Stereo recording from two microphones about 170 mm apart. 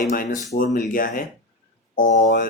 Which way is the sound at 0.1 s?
55° left (ahead or behind).